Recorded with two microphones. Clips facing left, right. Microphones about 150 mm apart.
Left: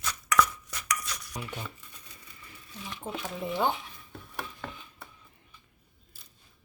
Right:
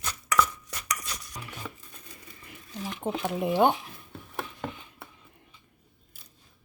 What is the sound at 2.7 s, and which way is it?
Speech, 45° right (ahead or behind).